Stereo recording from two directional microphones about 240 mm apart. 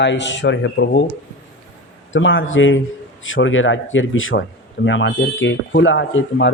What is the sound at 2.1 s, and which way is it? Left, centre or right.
A man's voice, left.